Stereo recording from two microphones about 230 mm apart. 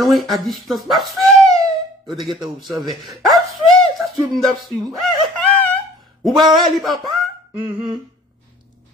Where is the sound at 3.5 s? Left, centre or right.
Centre.